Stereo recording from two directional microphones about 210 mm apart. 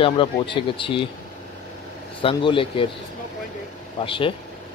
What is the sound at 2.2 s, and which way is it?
Speech, 25° left (ahead or behind).